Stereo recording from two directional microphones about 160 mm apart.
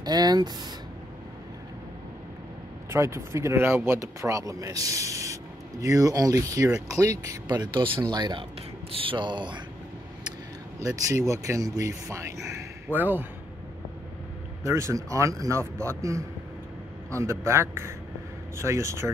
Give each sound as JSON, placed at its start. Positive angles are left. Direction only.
{"t": 0.0, "sound": "speech", "side_deg": -25}
{"t": 2.9, "sound": "speech", "side_deg": -15}
{"t": 10.8, "sound": "speech", "side_deg": -20}
{"t": 14.6, "sound": "a man's voice", "side_deg": -15}